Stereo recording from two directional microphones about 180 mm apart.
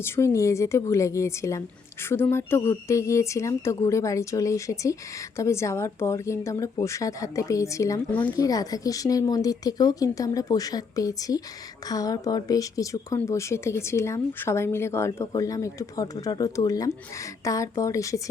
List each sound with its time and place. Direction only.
0.0 s a woman's voice: 15° left (ahead or behind)